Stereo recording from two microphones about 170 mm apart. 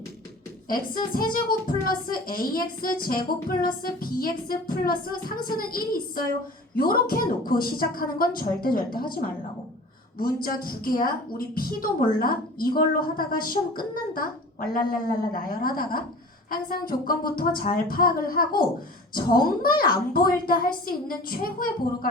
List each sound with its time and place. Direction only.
1.1 s a woman's voice: 60° left (ahead or behind)